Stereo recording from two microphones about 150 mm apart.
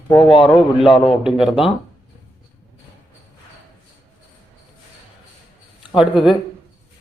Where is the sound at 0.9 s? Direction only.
30° left (ahead or behind).